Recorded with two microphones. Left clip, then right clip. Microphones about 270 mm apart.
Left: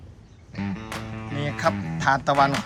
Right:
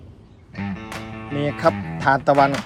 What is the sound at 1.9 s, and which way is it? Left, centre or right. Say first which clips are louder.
Speech: right 3 dB; centre.